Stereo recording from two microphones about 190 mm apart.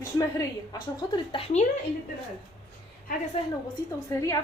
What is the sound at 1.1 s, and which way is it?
Speech, 30° left (ahead or behind).